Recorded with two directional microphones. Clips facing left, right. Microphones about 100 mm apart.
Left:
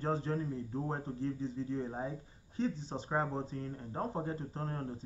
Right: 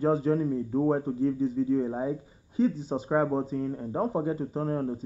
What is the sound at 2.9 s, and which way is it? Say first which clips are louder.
Speech: right 10 dB; 25° right (ahead or behind).